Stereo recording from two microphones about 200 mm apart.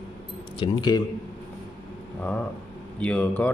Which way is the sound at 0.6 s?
20° left (ahead or behind).